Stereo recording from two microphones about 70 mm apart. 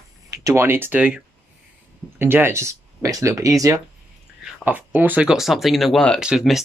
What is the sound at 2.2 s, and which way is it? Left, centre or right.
Speech, right.